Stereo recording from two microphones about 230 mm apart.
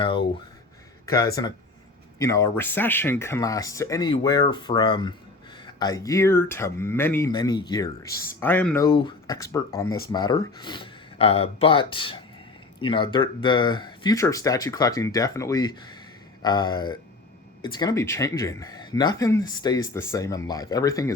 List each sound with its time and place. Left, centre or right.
0.0 s speech: left
8.9 s speech: left
9.8 s speech: left
10.1 s speech: centre